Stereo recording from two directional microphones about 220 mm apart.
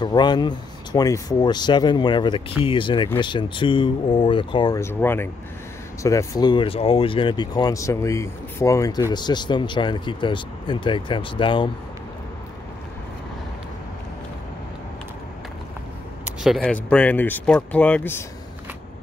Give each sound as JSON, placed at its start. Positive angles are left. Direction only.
{"t": 0.0, "sound": "speech", "side_deg": 20}
{"t": 16.3, "sound": "speech", "side_deg": 0}